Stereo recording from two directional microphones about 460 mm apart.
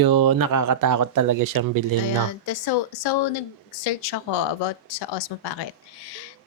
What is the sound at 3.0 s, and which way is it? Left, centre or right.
Speech, left.